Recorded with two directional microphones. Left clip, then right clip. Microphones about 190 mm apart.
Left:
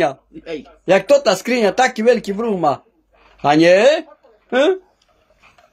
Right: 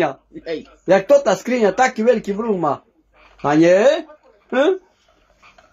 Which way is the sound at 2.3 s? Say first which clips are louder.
Left 2 dB; 35° left (ahead or behind).